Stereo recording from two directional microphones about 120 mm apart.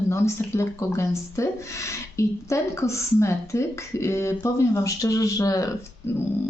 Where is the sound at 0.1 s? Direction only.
25° left (ahead or behind).